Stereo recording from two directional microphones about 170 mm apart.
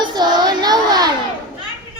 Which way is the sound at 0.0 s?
25° right (ahead or behind).